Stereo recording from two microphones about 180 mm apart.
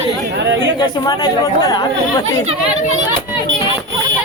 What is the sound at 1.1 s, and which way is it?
Speech, 20° left (ahead or behind).